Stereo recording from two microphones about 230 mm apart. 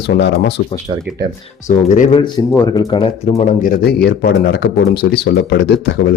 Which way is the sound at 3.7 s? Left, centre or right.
Left.